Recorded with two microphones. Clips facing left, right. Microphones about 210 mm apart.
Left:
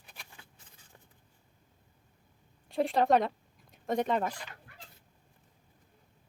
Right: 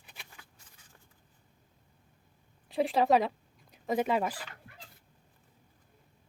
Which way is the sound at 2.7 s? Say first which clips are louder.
Even; centre (ahead or behind).